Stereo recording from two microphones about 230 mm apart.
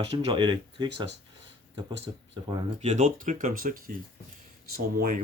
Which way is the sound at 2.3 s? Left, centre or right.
Right.